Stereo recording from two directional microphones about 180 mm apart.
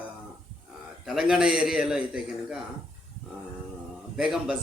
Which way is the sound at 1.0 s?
Centre (ahead or behind).